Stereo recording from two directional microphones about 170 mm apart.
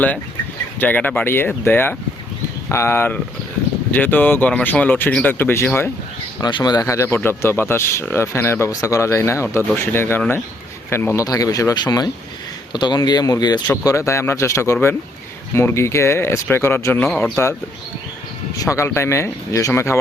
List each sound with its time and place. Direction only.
0.8 s speech: 10° left (ahead or behind)
6.4 s speech: 25° left (ahead or behind); by 17.3 s 5° left (ahead or behind)
18.5 s speech: 20° left (ahead or behind)